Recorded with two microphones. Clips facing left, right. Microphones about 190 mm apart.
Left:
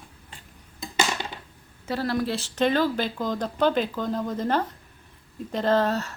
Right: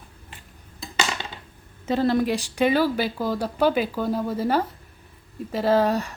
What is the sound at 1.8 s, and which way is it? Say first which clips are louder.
Speech: right 5 dB; 20° right (ahead or behind).